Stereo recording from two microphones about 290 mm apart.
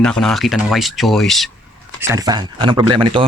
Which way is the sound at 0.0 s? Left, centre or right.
Centre.